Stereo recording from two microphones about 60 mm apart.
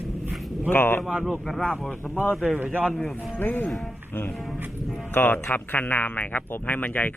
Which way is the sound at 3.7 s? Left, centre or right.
Centre.